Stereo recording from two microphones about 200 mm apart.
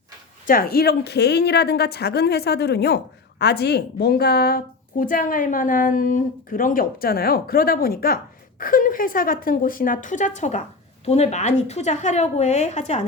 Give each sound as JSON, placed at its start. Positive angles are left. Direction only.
{"t": 0.4, "sound": "a woman's voice", "side_deg": 45}